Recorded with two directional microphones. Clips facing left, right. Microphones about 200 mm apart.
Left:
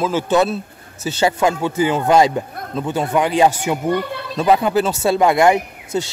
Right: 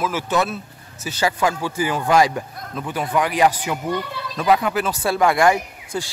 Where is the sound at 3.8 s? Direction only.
55° left (ahead or behind).